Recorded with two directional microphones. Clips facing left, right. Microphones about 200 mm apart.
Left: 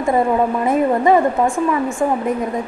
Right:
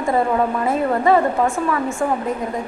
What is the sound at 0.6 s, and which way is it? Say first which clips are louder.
Speech: left 4 dB; 20° left (ahead or behind).